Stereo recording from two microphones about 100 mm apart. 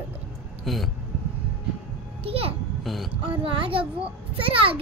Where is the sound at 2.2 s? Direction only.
75° right (ahead or behind).